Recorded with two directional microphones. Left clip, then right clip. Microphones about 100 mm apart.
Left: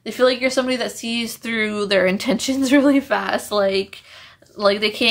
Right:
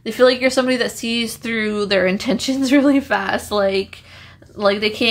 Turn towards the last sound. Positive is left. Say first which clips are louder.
# even
turn(degrees=15)  # may be behind; listen again after turning